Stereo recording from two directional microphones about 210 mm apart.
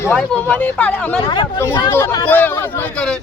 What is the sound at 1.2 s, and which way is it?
Speech, 20° left (ahead or behind).